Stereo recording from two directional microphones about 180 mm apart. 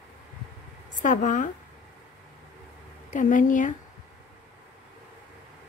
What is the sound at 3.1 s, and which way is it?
Speech, 45° left (ahead or behind).